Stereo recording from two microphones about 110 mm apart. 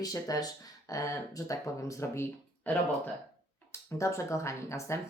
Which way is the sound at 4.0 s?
25° left (ahead or behind).